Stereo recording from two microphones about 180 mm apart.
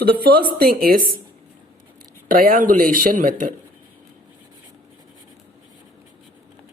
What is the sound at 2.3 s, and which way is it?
Speech, 50° right (ahead or behind).